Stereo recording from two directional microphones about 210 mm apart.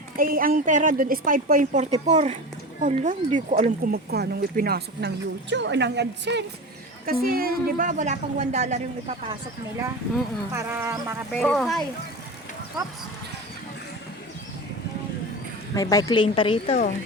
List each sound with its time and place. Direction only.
0.2 s a woman's voice: 40° right (ahead or behind)
3.9 s speech: 50° right (ahead or behind)
7.0 s a woman's voice: 45° right (ahead or behind)
10.5 s speech: 15° right (ahead or behind)
11.3 s speech: 5° left (ahead or behind)
15.7 s speech: 15° left (ahead or behind)